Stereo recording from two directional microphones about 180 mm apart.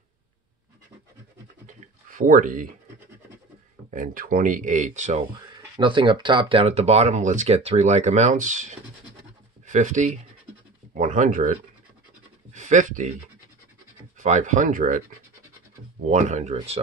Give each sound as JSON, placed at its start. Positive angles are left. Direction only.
{"t": 2.0, "sound": "speech", "side_deg": -50}
{"t": 3.9, "sound": "speech", "side_deg": -50}
{"t": 5.8, "sound": "speech", "side_deg": -25}
{"t": 12.5, "sound": "speech", "side_deg": -45}
{"t": 14.1, "sound": "speech", "side_deg": -40}
{"t": 16.1, "sound": "speech", "side_deg": -40}